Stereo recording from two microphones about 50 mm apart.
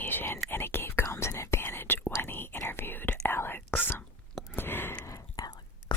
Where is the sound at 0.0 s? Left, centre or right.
Left.